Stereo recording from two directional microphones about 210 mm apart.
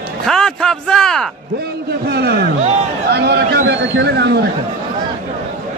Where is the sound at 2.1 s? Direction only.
50° right (ahead or behind).